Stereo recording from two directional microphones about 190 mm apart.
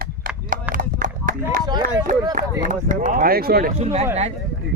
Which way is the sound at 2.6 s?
40° right (ahead or behind).